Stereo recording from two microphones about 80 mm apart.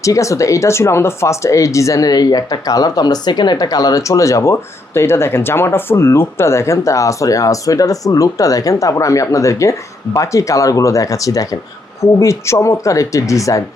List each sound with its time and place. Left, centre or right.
0.0 s speech: left